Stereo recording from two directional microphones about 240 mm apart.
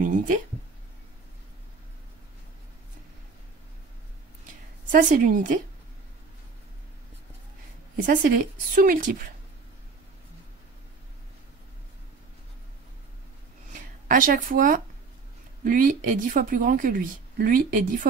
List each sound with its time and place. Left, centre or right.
0.0 s a sound: right
4.9 s a woman's voice: right
8.1 s a woman's voice: right
14.0 s a woman's voice: right